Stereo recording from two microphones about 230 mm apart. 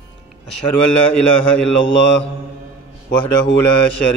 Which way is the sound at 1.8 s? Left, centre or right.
Left.